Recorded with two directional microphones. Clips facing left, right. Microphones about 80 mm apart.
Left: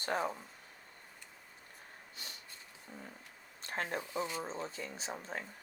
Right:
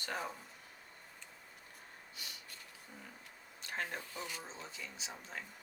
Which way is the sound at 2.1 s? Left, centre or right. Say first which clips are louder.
Left 1 dB; left.